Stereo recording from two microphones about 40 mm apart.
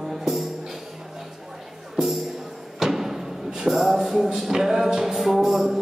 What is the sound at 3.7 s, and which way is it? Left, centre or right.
Music, centre.